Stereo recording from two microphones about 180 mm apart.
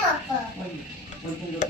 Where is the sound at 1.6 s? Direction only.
45° left (ahead or behind).